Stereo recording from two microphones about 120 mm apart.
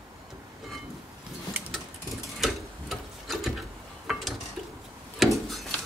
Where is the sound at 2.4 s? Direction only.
Centre (ahead or behind).